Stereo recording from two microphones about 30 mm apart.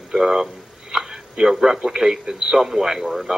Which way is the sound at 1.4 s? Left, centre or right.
Centre.